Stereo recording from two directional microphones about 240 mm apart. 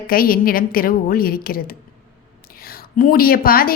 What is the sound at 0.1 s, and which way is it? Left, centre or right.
A woman's voice, left.